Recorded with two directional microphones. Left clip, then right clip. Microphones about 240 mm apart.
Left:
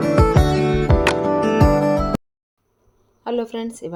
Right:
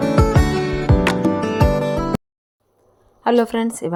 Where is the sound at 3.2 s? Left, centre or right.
Centre.